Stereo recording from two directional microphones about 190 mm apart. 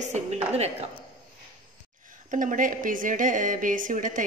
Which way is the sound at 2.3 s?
45° right (ahead or behind).